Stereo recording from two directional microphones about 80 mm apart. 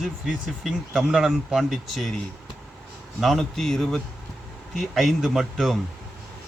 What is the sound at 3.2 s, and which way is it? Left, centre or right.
Speech, centre.